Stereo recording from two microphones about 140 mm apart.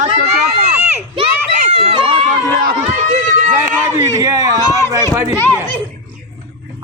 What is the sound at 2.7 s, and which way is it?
Run, 50° right (ahead or behind).